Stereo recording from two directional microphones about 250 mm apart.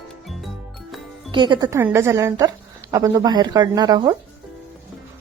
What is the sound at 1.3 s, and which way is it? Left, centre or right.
Speech, centre.